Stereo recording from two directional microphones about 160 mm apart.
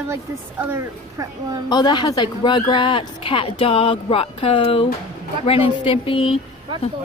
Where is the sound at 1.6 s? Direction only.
25° left (ahead or behind).